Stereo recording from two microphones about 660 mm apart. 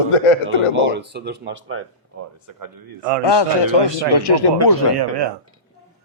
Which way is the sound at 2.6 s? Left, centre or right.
Right.